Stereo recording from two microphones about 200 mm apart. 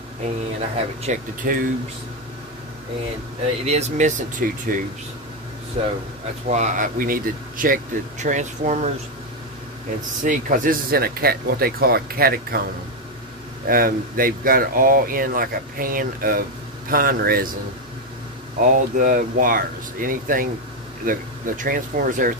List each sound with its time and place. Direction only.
0.6 s speech: 35° right (ahead or behind)
3.6 s speech: 35° right (ahead or behind)
5.8 s speech: 30° right (ahead or behind)
10.2 s speech: 40° right (ahead or behind)
13.7 s speech: 45° right (ahead or behind)
18.6 s speech: 40° right (ahead or behind)